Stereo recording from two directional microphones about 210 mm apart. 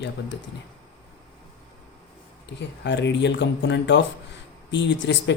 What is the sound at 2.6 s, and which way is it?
Speech, 60° left (ahead or behind).